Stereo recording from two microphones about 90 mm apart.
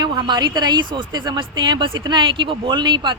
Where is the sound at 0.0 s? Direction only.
55° right (ahead or behind).